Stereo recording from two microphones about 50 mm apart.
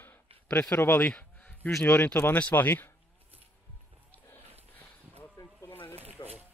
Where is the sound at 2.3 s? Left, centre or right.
Left.